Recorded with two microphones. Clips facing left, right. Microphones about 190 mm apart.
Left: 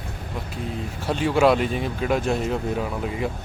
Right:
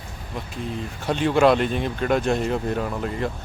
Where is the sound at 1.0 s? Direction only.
5° left (ahead or behind).